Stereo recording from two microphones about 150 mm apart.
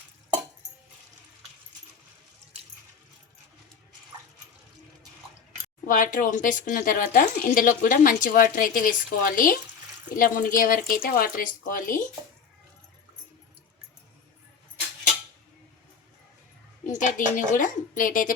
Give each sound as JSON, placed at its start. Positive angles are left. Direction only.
{"t": 5.8, "sound": "speech", "side_deg": 60}
{"t": 16.8, "sound": "speech", "side_deg": 55}